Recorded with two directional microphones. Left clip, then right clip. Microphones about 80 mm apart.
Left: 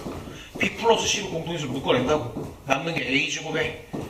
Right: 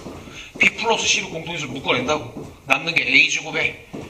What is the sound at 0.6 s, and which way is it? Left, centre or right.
A man's voice, right.